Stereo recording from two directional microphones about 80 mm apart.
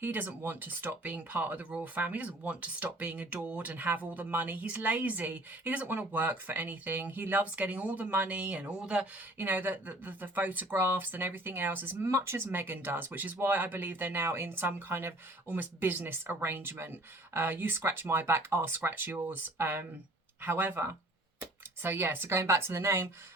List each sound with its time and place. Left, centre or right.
0.0 s speech: right
9.4 s speech: right